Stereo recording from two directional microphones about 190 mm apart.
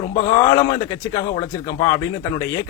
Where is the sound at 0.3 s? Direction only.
15° left (ahead or behind).